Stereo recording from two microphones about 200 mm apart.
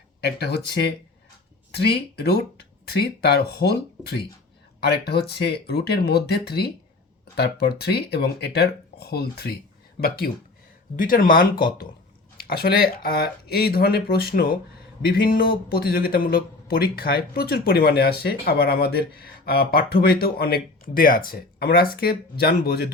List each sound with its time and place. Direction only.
0.2 s speech: 55° left (ahead or behind)
10.9 s speech: 45° left (ahead or behind)